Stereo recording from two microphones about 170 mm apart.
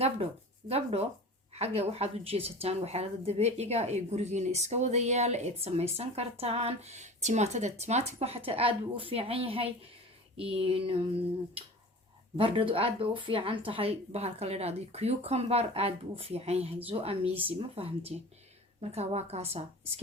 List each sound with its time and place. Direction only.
0.7 s a woman's voice: 35° right (ahead or behind)